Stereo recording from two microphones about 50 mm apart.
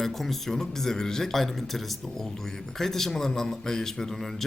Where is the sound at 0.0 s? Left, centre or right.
Centre.